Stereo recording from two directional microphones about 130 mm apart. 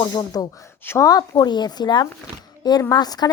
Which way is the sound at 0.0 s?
30° left (ahead or behind).